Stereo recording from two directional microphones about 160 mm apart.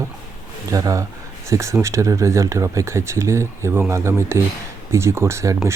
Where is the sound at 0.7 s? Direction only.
20° right (ahead or behind).